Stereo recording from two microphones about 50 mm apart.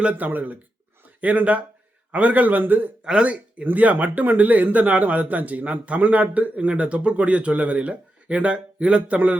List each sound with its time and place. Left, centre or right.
0.0 s a man's voice: right
3.0 s speech: right